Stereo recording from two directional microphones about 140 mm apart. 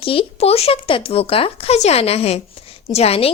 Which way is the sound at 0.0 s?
40° left (ahead or behind).